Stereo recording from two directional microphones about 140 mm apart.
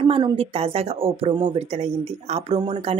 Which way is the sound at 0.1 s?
40° right (ahead or behind).